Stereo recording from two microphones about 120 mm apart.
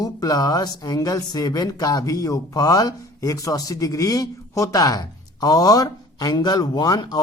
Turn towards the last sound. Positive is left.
turn(degrees=35)  # may be behind; listen again after turning